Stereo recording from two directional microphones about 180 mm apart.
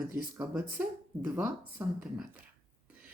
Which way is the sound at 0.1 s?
10° right (ahead or behind).